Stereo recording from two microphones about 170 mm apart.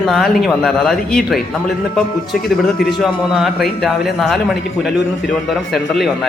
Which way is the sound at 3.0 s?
Centre (ahead or behind).